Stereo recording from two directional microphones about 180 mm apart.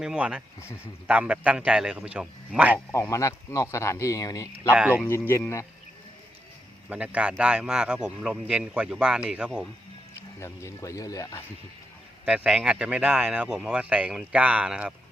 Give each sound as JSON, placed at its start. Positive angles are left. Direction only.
{"t": 0.0, "sound": "speech", "side_deg": -5}
{"t": 2.9, "sound": "speech", "side_deg": 15}
{"t": 4.7, "sound": "speech", "side_deg": -5}
{"t": 5.0, "sound": "speech", "side_deg": 15}
{"t": 6.9, "sound": "speech", "side_deg": -5}
{"t": 10.4, "sound": "speech", "side_deg": 15}
{"t": 12.2, "sound": "speech", "side_deg": -5}